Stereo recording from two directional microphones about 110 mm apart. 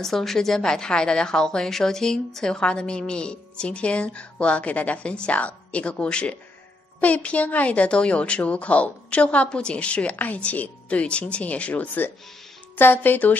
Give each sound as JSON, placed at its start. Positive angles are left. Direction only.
{"t": 0.0, "sound": "a woman's voice", "side_deg": 5}